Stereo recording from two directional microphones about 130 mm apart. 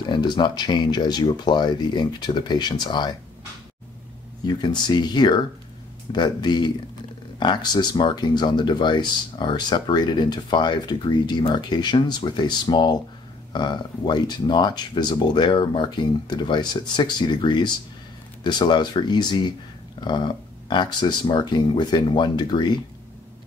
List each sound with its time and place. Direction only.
0.1 s speech: 35° left (ahead or behind)
4.5 s speech: 35° left (ahead or behind)